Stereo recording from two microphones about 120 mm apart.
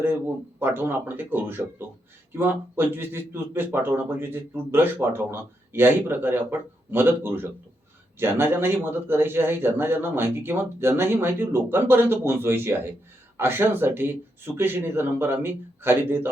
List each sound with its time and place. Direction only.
0.6 s a man's voice: 20° right (ahead or behind)